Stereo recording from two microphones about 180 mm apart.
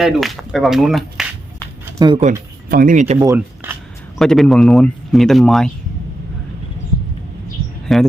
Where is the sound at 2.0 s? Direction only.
25° right (ahead or behind).